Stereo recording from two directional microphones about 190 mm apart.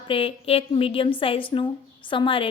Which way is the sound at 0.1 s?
30° left (ahead or behind).